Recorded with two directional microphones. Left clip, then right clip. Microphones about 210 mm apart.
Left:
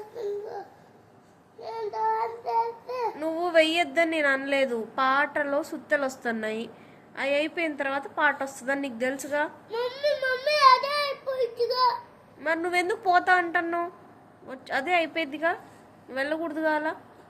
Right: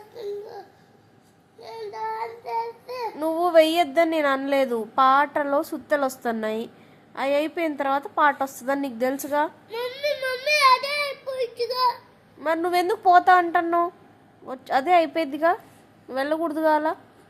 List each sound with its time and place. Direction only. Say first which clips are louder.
2.1 s child singing: left 2 dB; 20° right (ahead or behind)
5.9 s a woman's voice: right 3 dB; 20° right (ahead or behind)
10.1 s child singing: right 2 dB; 25° right (ahead or behind)
11.0 s a sound: even; 20° right (ahead or behind)
12.4 s a woman's voice: right 3 dB; 20° right (ahead or behind)